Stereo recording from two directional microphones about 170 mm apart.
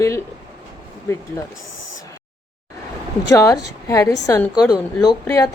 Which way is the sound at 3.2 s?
20° left (ahead or behind).